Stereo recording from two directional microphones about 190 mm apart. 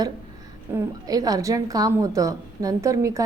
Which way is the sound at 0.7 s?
20° right (ahead or behind).